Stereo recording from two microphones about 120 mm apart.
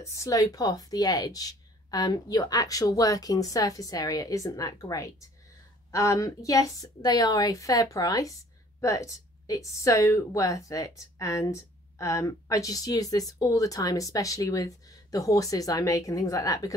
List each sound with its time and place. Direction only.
0.1 s a woman's voice: 25° left (ahead or behind)